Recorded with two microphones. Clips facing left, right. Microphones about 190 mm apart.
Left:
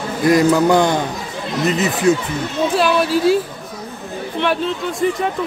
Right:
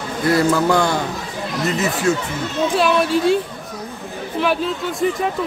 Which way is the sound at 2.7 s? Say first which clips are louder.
Even; centre (ahead or behind).